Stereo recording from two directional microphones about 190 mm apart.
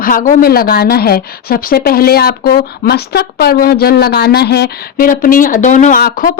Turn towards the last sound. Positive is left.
turn(degrees=50)  # may be behind; listen again after turning